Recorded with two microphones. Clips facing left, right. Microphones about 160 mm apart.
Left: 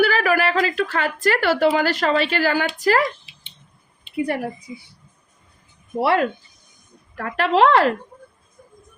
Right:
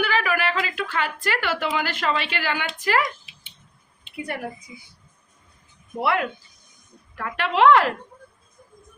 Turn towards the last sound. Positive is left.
turn(degrees=35)  # may be behind; listen again after turning